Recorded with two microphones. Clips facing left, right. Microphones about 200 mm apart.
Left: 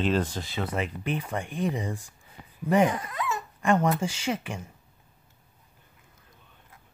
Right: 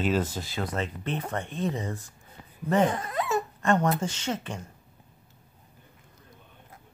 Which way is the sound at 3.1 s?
35° right (ahead or behind).